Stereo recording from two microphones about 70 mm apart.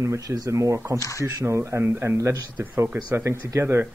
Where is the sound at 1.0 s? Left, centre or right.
Left.